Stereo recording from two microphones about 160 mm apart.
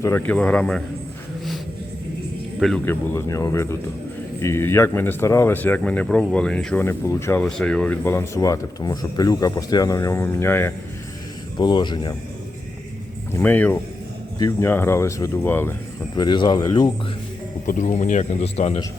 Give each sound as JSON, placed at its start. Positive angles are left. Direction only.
{"t": 0.0, "sound": "speech", "side_deg": 15}
{"t": 2.6, "sound": "speech", "side_deg": 0}
{"t": 2.8, "sound": "speech", "side_deg": 15}
{"t": 6.8, "sound": "speech", "side_deg": 15}
{"t": 7.4, "sound": "speech", "side_deg": 5}
{"t": 11.5, "sound": "speech", "side_deg": 30}
{"t": 13.3, "sound": "speech", "side_deg": 10}
{"t": 14.3, "sound": "speech", "side_deg": 25}
{"t": 16.1, "sound": "speech", "side_deg": 30}
{"t": 17.7, "sound": "a man's voice", "side_deg": 50}